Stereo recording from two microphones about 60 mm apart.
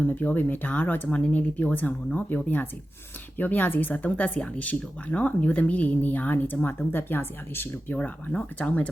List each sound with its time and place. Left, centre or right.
0.0 s speech: left
7.9 s speech: centre